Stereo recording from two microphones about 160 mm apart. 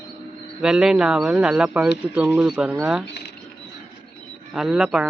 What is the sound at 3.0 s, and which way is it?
Speech, 90° left.